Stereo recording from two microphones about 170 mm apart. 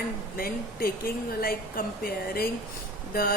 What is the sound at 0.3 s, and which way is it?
A woman's voice, 60° left (ahead or behind).